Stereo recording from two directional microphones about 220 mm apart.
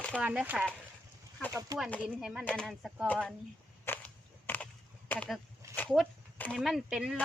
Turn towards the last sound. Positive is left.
turn(degrees=0)  # may be behind; listen again after turning